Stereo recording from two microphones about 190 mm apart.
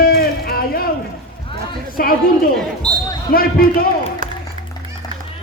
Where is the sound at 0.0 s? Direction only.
55° left (ahead or behind).